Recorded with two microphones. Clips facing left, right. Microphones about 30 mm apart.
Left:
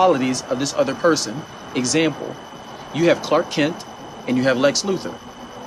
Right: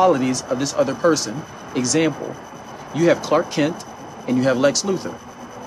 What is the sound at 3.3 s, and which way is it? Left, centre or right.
Speech, centre.